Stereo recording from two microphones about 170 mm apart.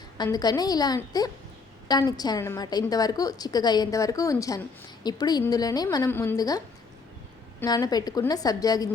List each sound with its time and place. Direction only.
0.2 s a woman's voice: 25° left (ahead or behind)
7.6 s a woman's voice: 20° left (ahead or behind)